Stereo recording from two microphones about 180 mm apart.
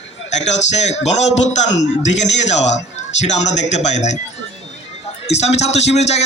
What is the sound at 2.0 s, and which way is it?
Speech, 40° left (ahead or behind).